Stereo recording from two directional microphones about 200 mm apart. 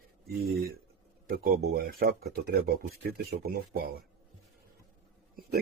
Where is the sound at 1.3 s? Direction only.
50° right (ahead or behind).